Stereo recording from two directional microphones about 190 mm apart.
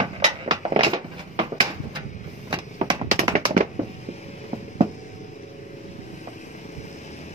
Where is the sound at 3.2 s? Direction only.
35° right (ahead or behind).